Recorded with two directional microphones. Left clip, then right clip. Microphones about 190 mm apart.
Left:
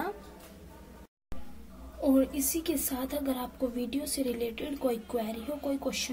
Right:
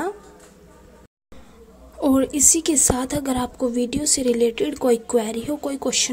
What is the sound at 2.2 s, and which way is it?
A woman's voice, 45° right (ahead or behind).